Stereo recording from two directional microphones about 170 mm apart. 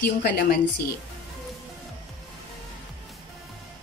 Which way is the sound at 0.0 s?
75° left (ahead or behind).